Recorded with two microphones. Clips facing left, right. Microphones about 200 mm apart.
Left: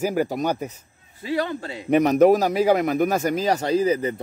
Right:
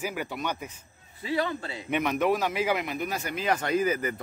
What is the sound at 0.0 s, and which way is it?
Speech, 40° left (ahead or behind).